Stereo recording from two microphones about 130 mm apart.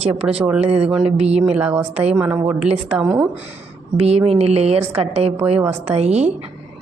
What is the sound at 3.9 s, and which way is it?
A woman's voice, 50° right (ahead or behind).